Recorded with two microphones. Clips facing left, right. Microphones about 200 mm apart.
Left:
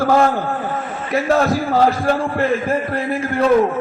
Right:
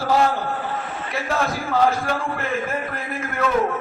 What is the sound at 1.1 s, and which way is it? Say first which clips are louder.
A man's voice: left 9 dB; 40° left (ahead or behind).